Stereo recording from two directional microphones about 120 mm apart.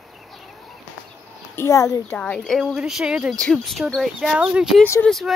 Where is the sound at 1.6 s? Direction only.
25° left (ahead or behind).